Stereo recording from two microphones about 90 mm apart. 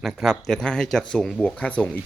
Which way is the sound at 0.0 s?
Centre (ahead or behind).